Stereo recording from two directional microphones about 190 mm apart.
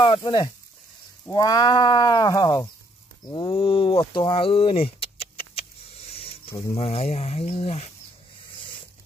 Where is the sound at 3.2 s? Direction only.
25° left (ahead or behind).